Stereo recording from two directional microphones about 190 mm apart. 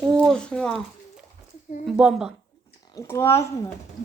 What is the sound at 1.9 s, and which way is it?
Speech, 5° right (ahead or behind).